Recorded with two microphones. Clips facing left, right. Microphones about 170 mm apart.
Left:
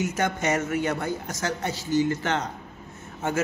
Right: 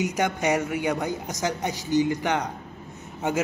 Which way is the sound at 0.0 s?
15° right (ahead or behind).